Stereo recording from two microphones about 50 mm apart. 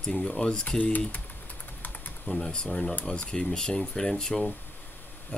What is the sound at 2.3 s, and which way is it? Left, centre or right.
Speech, centre.